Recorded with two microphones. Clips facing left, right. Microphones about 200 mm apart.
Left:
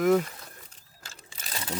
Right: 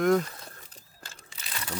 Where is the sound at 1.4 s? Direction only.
35° left (ahead or behind).